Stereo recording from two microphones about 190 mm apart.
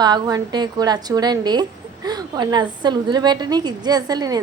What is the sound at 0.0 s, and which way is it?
A woman's voice, 20° right (ahead or behind).